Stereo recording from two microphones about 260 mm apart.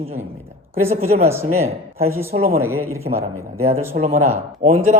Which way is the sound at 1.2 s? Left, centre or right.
Centre.